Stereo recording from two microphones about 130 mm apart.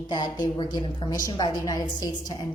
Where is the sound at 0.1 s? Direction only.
35° left (ahead or behind).